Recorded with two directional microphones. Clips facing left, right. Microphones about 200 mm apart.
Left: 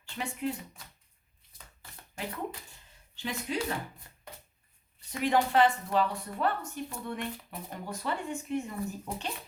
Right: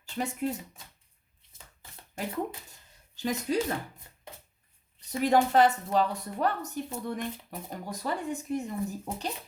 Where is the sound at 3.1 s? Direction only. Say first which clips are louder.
Right 5 dB; 40° right (ahead or behind).